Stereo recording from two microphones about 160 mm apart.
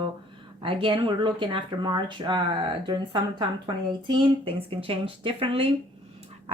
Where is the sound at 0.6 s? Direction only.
35° right (ahead or behind).